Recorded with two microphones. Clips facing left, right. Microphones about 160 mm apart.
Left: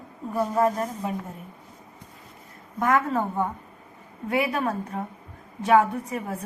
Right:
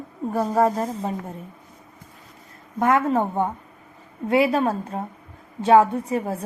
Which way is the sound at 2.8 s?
25° right (ahead or behind).